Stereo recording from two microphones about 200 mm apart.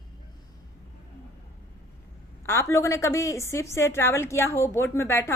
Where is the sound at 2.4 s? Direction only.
15° left (ahead or behind).